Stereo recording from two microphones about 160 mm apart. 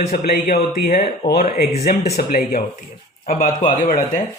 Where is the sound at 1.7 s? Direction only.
45° left (ahead or behind).